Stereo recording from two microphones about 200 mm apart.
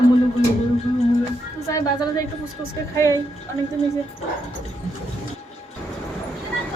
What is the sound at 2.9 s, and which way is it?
Speech, 15° left (ahead or behind).